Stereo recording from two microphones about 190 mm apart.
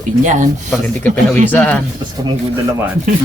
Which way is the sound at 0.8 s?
10° left (ahead or behind).